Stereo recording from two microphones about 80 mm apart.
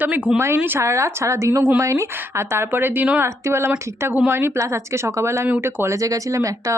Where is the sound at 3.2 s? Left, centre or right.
Right.